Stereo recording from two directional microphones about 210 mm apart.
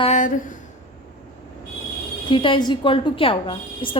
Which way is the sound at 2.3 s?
25° left (ahead or behind).